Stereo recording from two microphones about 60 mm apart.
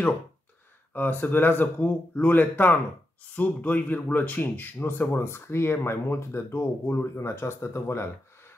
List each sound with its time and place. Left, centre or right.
0.9 s speech: left